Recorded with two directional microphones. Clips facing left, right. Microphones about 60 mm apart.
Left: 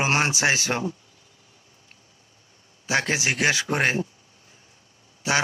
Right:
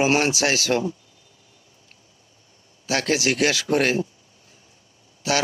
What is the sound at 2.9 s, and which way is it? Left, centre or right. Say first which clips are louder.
A man's voice: right 2 dB; left.